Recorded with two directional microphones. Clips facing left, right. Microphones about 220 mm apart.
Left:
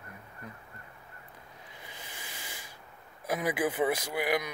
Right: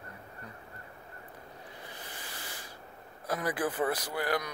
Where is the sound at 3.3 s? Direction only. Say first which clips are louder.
Left 2 dB; 10° left (ahead or behind).